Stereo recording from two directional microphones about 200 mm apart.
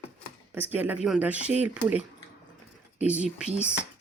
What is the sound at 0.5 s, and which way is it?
Speech, 10° right (ahead or behind).